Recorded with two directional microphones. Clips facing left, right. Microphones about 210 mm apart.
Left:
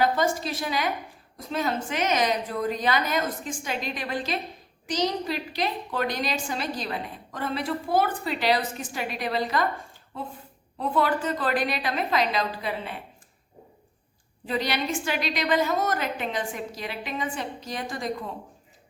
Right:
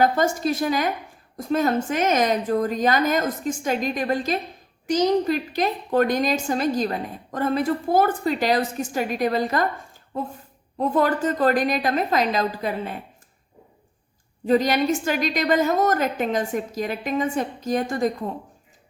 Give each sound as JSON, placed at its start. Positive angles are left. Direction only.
{"t": 0.0, "sound": "a woman's voice", "side_deg": -45}
{"t": 14.4, "sound": "a woman's voice", "side_deg": -45}